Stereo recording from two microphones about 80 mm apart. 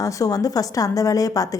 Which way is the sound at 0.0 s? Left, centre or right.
Left.